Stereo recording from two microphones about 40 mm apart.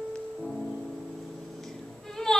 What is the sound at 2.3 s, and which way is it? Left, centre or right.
Insect, centre.